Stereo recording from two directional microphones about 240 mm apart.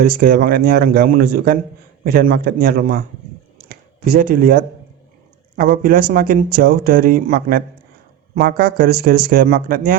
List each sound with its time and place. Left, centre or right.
0.0 s speech: right
3.7 s a sound: right
5.5 s speech: right